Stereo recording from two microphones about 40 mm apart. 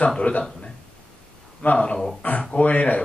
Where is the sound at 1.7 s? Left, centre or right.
Left.